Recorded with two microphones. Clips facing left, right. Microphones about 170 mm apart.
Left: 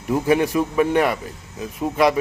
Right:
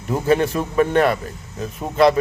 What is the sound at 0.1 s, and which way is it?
A man's voice, 10° left (ahead or behind).